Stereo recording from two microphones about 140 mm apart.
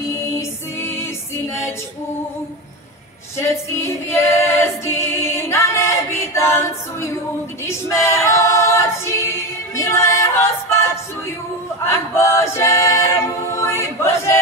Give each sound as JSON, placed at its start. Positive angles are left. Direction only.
{"t": 0.1, "sound": "music", "side_deg": 20}
{"t": 3.3, "sound": "a capella", "side_deg": 20}
{"t": 9.8, "sound": "music", "side_deg": 20}
{"t": 11.8, "sound": "a capella", "side_deg": 20}